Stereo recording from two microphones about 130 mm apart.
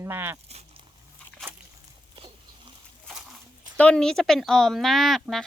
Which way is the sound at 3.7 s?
10° left (ahead or behind).